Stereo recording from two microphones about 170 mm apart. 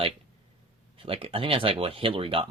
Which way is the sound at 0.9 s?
30° right (ahead or behind).